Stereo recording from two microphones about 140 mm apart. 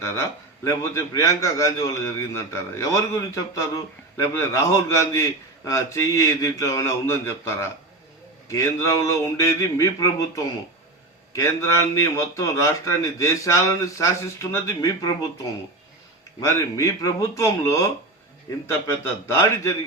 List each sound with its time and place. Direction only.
0.0 s a man's voice: 20° left (ahead or behind)
16.4 s a man's voice: 20° left (ahead or behind)
18.9 s a man's voice: 20° left (ahead or behind)